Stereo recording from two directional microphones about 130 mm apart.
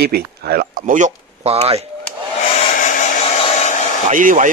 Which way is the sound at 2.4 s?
50° left (ahead or behind).